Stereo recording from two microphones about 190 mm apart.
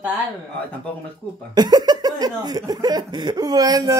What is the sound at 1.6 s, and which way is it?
Speech, 20° right (ahead or behind).